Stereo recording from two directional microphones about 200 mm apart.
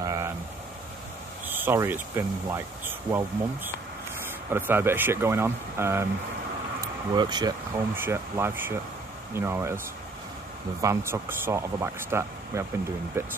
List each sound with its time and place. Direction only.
0.0 s vehicle: 15° right (ahead or behind)
1.4 s speech: 10° right (ahead or behind)
10.8 s speech: 15° right (ahead or behind)